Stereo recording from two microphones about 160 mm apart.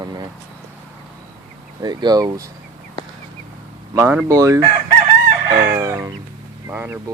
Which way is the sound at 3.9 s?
15° right (ahead or behind).